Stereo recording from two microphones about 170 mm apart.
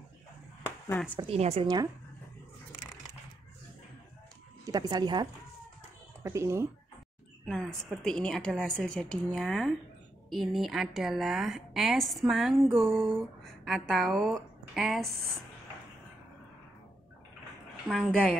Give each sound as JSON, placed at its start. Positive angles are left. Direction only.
{"t": 0.7, "sound": "a sound", "side_deg": 15}
{"t": 1.2, "sound": "a woman's voice", "side_deg": -40}
{"t": 4.6, "sound": "speech", "side_deg": -20}
{"t": 7.4, "sound": "a woman's voice", "side_deg": 5}
{"t": 17.8, "sound": "a woman's voice", "side_deg": 0}